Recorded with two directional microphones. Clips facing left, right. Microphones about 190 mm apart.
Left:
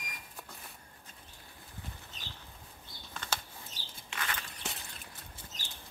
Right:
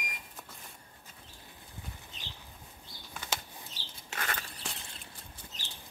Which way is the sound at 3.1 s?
10° right (ahead or behind).